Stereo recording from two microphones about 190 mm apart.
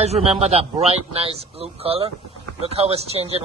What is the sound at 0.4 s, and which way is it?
Speech, 35° right (ahead or behind).